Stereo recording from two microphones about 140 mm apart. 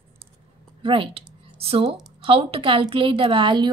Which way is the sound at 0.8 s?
40° right (ahead or behind).